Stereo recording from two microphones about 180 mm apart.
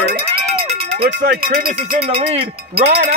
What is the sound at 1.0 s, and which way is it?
Cowbell, 55° right (ahead or behind).